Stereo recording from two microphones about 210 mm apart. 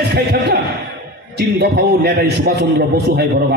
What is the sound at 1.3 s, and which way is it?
A man's voice, 50° right (ahead or behind).